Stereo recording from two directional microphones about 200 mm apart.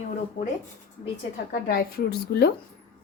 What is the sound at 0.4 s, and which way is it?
Speech, 40° left (ahead or behind).